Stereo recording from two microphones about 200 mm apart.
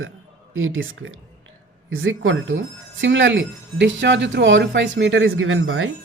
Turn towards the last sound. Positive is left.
turn(degrees=-90)